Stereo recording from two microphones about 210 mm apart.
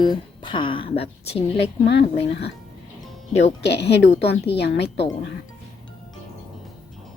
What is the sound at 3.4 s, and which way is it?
A woman's voice, 55° left (ahead or behind).